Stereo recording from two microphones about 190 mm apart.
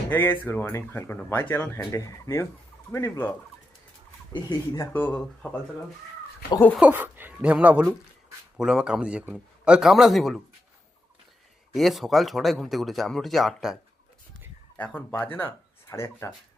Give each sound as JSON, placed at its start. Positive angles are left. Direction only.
{"t": 0.1, "sound": "speech", "side_deg": 10}
{"t": 4.4, "sound": "speech", "side_deg": 15}
{"t": 6.7, "sound": "speech", "side_deg": -10}
{"t": 11.7, "sound": "speech", "side_deg": 0}
{"t": 14.8, "sound": "speech", "side_deg": 10}